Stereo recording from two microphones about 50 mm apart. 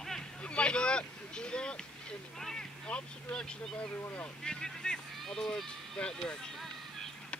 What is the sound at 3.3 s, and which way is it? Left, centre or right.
Speech, centre.